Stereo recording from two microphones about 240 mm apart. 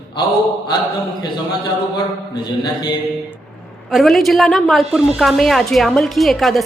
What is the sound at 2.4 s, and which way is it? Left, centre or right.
Mantra, centre.